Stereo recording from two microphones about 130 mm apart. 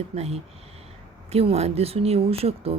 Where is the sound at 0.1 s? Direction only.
55° right (ahead or behind).